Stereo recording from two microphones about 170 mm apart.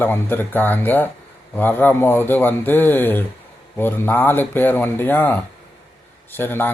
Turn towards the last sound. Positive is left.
turn(degrees=10)  # may be behind; listen again after turning